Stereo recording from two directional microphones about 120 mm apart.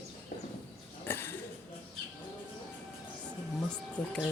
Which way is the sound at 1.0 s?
20° left (ahead or behind).